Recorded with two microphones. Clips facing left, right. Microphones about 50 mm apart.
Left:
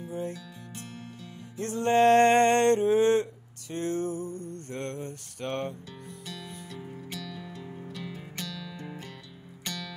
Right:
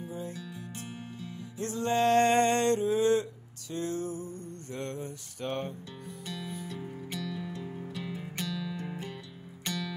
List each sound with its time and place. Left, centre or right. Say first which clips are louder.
0.3 s music: even; centre
1.6 s music: left 5 dB; left
6.2 s music: right 4 dB; centre